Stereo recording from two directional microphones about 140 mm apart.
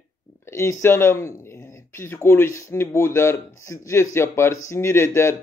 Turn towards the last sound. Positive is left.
turn(degrees=20)  # may be behind; listen again after turning